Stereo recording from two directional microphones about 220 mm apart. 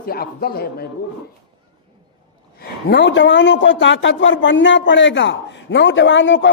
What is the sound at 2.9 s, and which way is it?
Speech, 55° left (ahead or behind).